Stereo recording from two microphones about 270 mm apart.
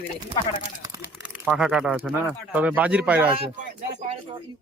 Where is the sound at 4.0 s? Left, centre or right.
Right.